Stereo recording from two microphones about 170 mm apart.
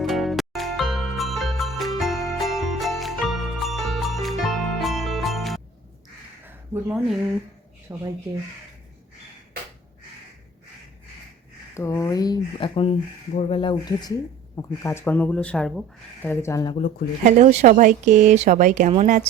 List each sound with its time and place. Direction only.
0.0 s music: centre (ahead or behind)
6.4 s a sound: 10° right (ahead or behind)
7.9 s speech: 20° right (ahead or behind)
11.7 s speech: 15° left (ahead or behind)
14.5 s speech: 15° left (ahead or behind)
16.2 s speech: 15° left (ahead or behind)
17.2 s speech: 40° right (ahead or behind)